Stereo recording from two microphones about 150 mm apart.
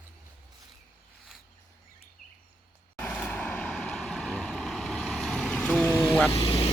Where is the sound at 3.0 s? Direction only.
10° left (ahead or behind).